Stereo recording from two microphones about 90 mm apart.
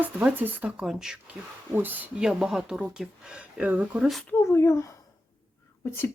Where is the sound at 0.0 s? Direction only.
20° right (ahead or behind).